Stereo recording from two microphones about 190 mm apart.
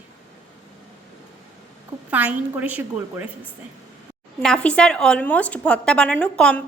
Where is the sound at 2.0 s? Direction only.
10° right (ahead or behind).